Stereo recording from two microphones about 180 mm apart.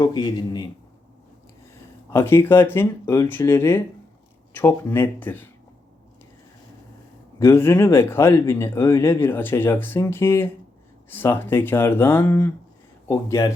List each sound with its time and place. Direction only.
0.0 s a man's voice: 25° left (ahead or behind)
2.1 s speech: 15° left (ahead or behind)
7.3 s speech: 15° left (ahead or behind)